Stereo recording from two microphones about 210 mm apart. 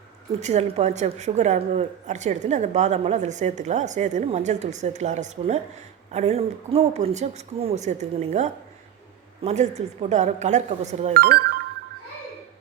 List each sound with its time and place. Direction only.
0.3 s speech: 30° right (ahead or behind)